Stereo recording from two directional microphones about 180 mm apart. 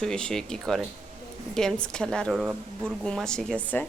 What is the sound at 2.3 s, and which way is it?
Speech, 10° right (ahead or behind).